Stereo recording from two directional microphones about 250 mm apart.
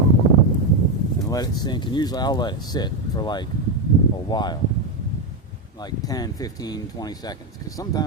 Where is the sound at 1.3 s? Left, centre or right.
Centre.